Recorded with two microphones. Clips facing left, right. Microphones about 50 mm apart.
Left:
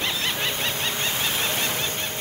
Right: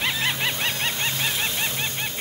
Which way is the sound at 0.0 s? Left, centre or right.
Centre.